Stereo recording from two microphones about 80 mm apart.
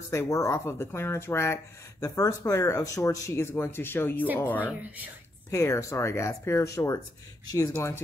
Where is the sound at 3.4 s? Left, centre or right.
Left.